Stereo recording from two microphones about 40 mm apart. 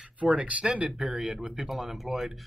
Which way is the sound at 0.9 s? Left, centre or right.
Centre.